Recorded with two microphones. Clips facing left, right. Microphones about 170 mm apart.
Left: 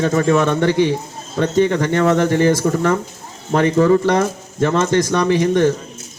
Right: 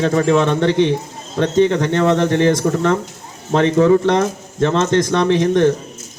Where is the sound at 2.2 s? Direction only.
5° left (ahead or behind).